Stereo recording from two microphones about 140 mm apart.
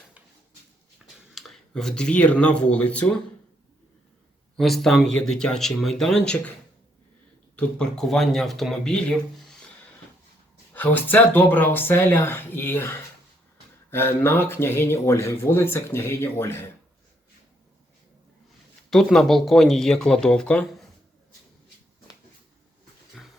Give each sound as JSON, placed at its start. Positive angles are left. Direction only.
{"t": 1.0, "sound": "speech", "side_deg": 0}
{"t": 4.5, "sound": "speech", "side_deg": 0}
{"t": 7.5, "sound": "speech", "side_deg": 5}
{"t": 10.8, "sound": "speech", "side_deg": 15}
{"t": 18.9, "sound": "speech", "side_deg": 0}
{"t": 23.2, "sound": "dog", "side_deg": 0}